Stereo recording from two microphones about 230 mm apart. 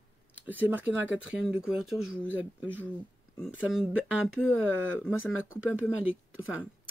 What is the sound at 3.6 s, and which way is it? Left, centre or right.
Speech, centre.